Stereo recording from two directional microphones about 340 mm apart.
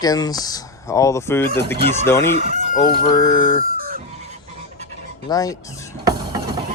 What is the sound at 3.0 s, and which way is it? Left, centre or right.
Speech, centre.